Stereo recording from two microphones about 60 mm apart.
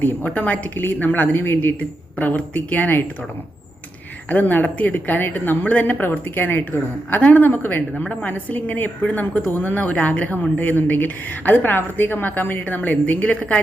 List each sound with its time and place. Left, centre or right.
0.0 s a woman's voice: left
4.3 s a woman's voice: left
7.9 s a woman's voice: centre